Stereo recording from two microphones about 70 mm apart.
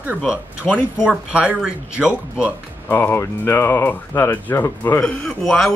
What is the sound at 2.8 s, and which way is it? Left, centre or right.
Speech, left.